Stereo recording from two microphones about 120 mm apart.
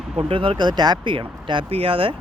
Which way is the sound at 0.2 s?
50° right (ahead or behind).